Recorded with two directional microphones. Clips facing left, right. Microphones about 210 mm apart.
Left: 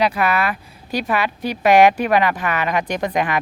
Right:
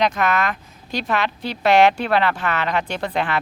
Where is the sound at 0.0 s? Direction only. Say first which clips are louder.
Left 1 dB; 10° left (ahead or behind).